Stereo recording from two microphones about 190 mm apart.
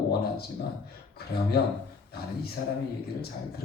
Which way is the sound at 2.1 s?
55° left (ahead or behind).